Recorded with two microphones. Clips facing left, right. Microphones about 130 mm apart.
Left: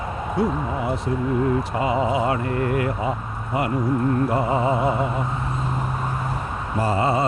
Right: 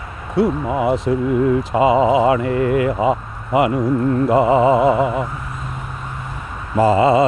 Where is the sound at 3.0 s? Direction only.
90° right.